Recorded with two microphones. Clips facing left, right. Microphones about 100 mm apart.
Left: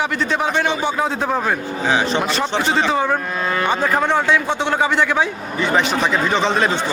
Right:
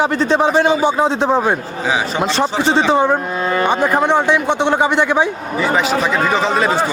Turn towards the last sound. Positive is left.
turn(degrees=-5)  # may be behind; listen again after turning